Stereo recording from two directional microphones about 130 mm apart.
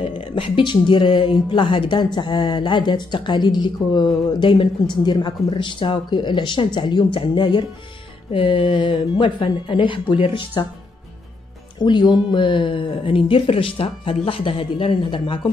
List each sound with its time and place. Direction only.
0.1 s speech: 40° left (ahead or behind)
11.8 s speech: 35° left (ahead or behind)